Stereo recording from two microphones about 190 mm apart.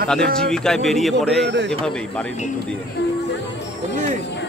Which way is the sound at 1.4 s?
65° right (ahead or behind).